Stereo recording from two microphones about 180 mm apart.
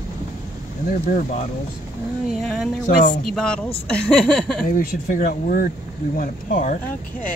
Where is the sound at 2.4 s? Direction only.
Centre (ahead or behind).